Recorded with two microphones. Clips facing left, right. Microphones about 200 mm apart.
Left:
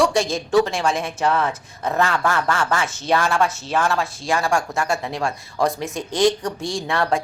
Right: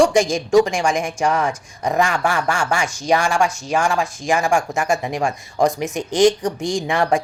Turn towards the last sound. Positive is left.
turn(degrees=-15)  # may be behind; listen again after turning